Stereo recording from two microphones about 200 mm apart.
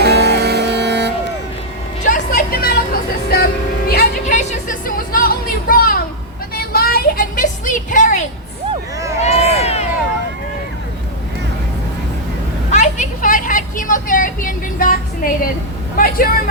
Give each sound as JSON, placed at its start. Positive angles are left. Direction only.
{"t": 0.0, "sound": "vehicle", "side_deg": -55}
{"t": 2.0, "sound": "vehicle", "side_deg": 45}
{"t": 6.5, "sound": "music", "side_deg": 50}
{"t": 8.7, "sound": "a sound", "side_deg": -15}
{"t": 9.2, "sound": "a sound", "side_deg": 30}
{"t": 12.7, "sound": "vehicle", "side_deg": 40}